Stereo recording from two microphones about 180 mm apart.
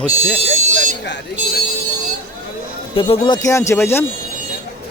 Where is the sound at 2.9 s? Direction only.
30° left (ahead or behind); by 4.0 s 15° left (ahead or behind).